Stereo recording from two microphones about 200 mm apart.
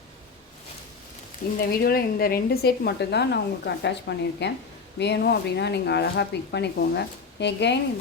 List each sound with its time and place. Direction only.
1.5 s a woman's voice: 50° left (ahead or behind)